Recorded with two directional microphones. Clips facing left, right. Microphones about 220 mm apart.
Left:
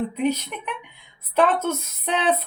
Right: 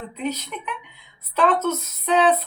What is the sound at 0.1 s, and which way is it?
Speech, 55° left (ahead or behind).